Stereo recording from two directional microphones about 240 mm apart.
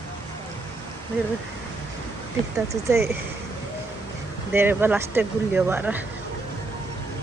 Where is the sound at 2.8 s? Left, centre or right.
Centre.